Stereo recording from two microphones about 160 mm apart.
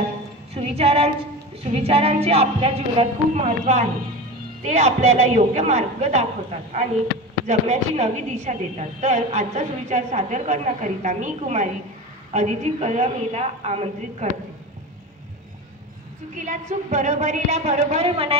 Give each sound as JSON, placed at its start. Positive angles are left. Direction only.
{"t": 0.6, "sound": "music", "side_deg": -40}
{"t": 1.6, "sound": "a woman's voice", "side_deg": -40}
{"t": 7.4, "sound": "a woman's voice", "side_deg": -45}
{"t": 16.3, "sound": "a woman's voice", "side_deg": -50}